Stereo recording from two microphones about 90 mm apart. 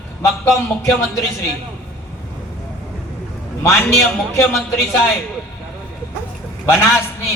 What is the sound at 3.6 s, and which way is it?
A man's voice, 35° left (ahead or behind).